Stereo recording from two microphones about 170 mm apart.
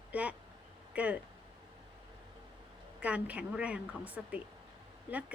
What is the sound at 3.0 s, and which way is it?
A woman's voice, 10° right (ahead or behind).